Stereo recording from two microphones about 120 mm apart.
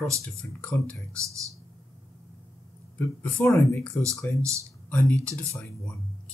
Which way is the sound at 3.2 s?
20° left (ahead or behind).